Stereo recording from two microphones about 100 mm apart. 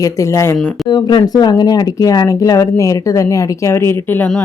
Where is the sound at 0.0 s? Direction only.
30° left (ahead or behind).